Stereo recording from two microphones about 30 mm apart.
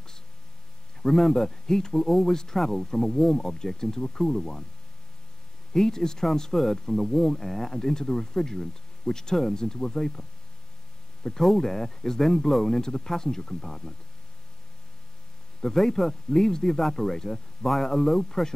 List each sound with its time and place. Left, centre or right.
1.0 s speech: centre
3.4 s speech: centre
5.7 s speech: centre
11.2 s speech: centre
15.6 s speech: centre